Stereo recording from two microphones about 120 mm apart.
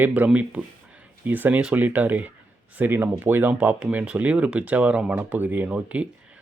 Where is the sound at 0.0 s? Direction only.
15° right (ahead or behind).